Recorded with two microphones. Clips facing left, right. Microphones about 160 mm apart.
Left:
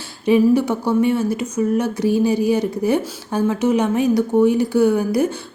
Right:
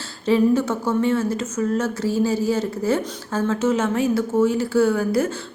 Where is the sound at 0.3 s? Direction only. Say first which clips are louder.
Left 3 dB; 15° left (ahead or behind).